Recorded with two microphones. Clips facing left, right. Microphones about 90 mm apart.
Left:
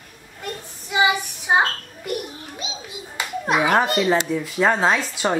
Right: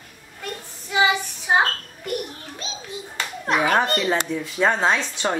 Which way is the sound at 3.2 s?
15° left (ahead or behind).